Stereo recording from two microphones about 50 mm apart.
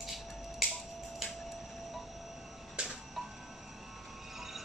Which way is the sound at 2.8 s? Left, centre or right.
Right.